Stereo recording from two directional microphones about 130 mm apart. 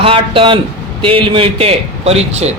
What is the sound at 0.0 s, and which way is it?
A man's voice, 45° right (ahead or behind).